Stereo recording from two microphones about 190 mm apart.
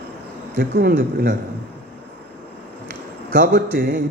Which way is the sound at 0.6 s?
50° right (ahead or behind).